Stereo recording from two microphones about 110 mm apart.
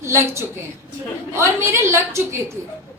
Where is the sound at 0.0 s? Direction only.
25° right (ahead or behind).